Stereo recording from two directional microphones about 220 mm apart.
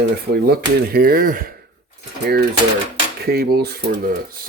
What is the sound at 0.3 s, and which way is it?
Speech, 45° right (ahead or behind).